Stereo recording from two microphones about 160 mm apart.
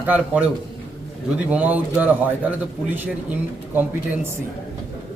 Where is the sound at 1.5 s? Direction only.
10° right (ahead or behind).